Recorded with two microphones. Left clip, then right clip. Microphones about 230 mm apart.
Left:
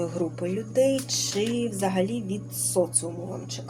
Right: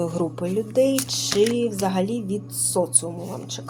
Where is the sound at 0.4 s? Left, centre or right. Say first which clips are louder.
Right 3 dB; centre.